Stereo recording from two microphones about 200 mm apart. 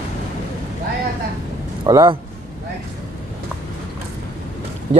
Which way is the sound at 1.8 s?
20° right (ahead or behind).